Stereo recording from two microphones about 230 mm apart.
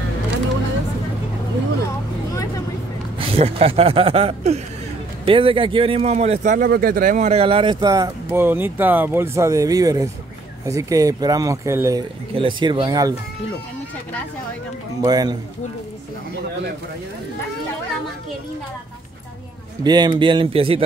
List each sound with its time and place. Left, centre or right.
3.2 s speech: right
15.0 s speech: centre
19.8 s speech: centre